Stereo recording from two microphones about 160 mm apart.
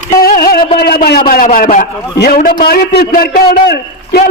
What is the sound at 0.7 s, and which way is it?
A man's voice, 75° left (ahead or behind).